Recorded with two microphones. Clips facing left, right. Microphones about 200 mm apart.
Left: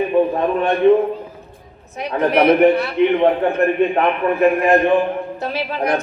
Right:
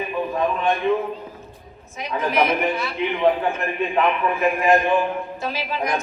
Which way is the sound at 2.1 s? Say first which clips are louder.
Left 7 dB; 65° left (ahead or behind).